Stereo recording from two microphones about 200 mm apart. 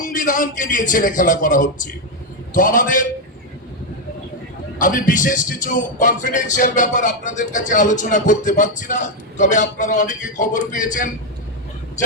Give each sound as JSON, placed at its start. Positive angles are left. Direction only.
{"t": 0.0, "sound": "speech", "side_deg": 40}
{"t": 4.8, "sound": "speech", "side_deg": 40}